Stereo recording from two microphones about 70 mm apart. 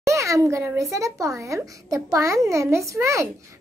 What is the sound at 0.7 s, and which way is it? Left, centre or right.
A child's voice, right.